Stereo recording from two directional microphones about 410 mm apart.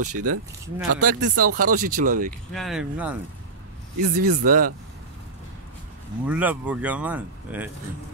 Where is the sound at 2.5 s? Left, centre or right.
Centre.